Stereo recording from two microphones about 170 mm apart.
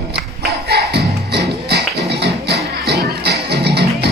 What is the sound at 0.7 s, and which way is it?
Music, 75° right (ahead or behind).